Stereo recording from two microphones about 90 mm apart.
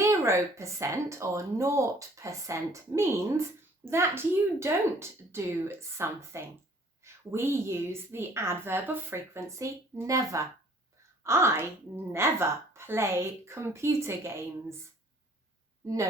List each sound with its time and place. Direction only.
0.0 s a woman's voice: 30° right (ahead or behind)